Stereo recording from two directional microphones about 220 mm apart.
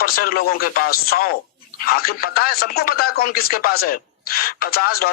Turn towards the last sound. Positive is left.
turn(degrees=45)  # may be behind; listen again after turning